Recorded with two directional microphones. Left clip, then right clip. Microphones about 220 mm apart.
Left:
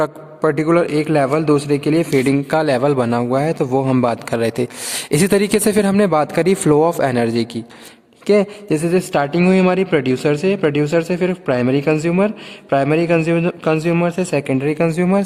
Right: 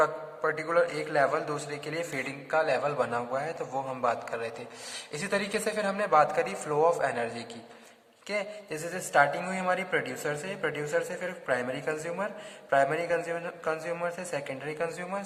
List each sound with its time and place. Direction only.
0.0 s a man's voice: 45° left (ahead or behind)